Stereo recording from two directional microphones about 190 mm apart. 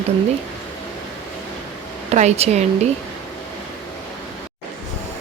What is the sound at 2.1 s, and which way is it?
Speech, 35° right (ahead or behind).